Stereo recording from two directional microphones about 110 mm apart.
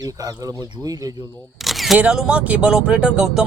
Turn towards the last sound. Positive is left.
turn(degrees=-5)  # may be behind; listen again after turning